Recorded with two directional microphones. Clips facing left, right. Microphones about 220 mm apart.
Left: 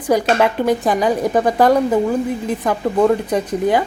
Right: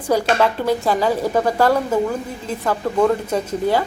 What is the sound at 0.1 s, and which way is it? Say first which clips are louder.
A woman's voice: left 2 dB; 15° left (ahead or behind).